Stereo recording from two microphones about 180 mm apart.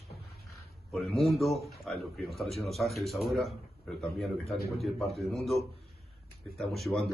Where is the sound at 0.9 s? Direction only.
Centre (ahead or behind).